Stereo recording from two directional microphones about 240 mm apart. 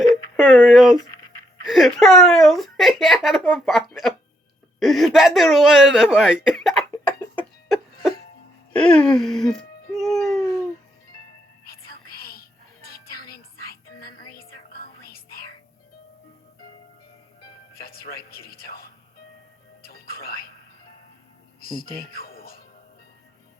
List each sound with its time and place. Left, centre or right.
0.3 s speech: centre
8.7 s baby cry: centre
11.6 s music: left
17.7 s a sound: left
19.8 s music: left
21.6 s music: left